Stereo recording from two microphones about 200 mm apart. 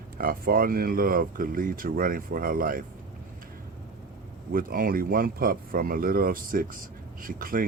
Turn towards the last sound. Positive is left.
turn(degrees=-45)  # may be behind; listen again after turning